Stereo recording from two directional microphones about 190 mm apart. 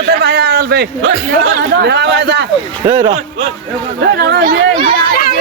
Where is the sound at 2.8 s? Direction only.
20° right (ahead or behind).